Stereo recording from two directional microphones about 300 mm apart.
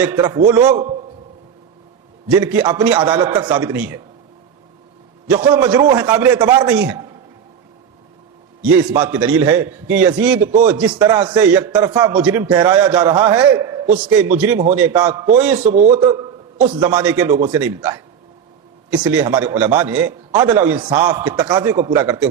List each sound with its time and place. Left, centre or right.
0.0 s a man's voice: centre
2.2 s a man's voice: centre
5.5 s a man's voice: centre
8.6 s a man's voice: centre
15.7 s a man's voice: right
16.6 s a man's voice: centre